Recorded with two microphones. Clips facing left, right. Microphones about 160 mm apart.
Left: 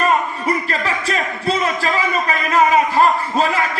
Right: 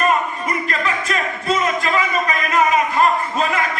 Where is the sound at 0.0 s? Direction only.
35° left (ahead or behind).